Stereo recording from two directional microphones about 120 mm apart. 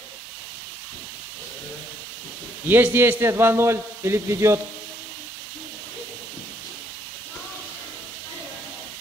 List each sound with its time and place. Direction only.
2.7 s a man's voice: 20° right (ahead or behind)